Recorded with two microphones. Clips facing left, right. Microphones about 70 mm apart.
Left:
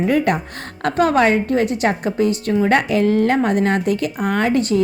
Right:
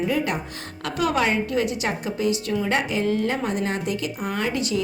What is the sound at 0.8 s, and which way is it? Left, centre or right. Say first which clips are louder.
A woman's voice: left 7 dB; left.